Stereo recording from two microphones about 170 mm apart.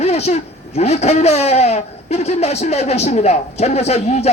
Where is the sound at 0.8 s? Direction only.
40° left (ahead or behind).